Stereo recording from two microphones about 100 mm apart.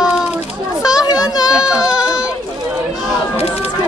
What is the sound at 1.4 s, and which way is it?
Baby cry, 5° right (ahead or behind).